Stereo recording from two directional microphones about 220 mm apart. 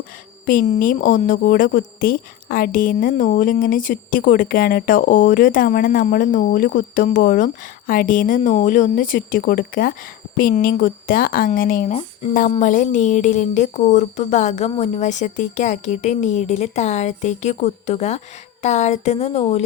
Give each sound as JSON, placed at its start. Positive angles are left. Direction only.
{"t": 0.4, "sound": "a woman's voice", "side_deg": 40}